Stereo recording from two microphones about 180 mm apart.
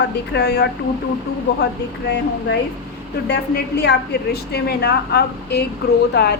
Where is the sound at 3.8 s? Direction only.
65° left (ahead or behind).